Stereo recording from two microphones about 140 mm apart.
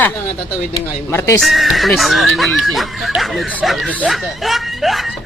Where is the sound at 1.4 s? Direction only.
Centre (ahead or behind).